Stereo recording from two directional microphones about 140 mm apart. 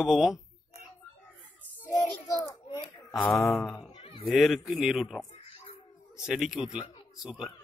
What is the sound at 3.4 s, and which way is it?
Speech, 10° left (ahead or behind).